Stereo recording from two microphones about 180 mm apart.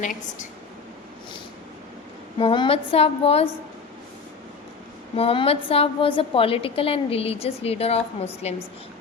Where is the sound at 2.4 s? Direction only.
30° left (ahead or behind).